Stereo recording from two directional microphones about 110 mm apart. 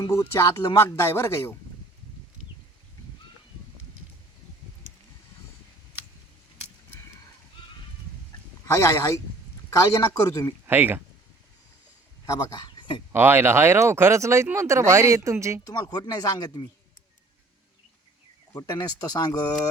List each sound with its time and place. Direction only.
0.1 s speech: 25° left (ahead or behind)
4.9 s a sound: 90° right
8.6 s speech: 25° left (ahead or behind)
10.7 s speech: 20° right (ahead or behind)
12.2 s speech: 35° left (ahead or behind)
13.1 s speech: 20° right (ahead or behind)
15.6 s speech: 35° left (ahead or behind)
18.5 s speech: 30° left (ahead or behind)